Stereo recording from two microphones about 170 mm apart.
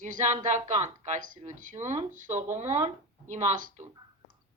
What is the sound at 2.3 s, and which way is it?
Speech, 15° right (ahead or behind).